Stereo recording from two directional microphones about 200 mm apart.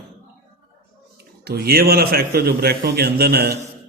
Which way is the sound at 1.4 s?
50° right (ahead or behind).